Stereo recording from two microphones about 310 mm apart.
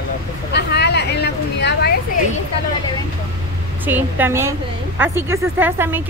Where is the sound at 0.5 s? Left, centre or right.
Left.